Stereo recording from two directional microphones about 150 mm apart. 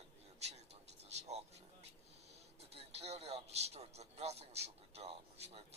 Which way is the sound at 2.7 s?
45° right (ahead or behind).